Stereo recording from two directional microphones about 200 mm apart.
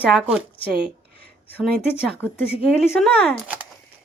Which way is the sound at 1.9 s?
10° left (ahead or behind).